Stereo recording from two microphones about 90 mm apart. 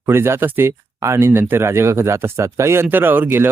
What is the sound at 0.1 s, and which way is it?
Speech, 25° right (ahead or behind).